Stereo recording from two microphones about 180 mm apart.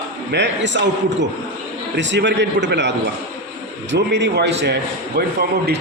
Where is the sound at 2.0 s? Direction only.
80° right; by 5.7 s 60° right (ahead or behind).